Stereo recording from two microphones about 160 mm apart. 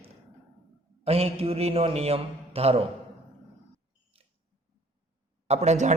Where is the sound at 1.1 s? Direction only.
40° right (ahead or behind).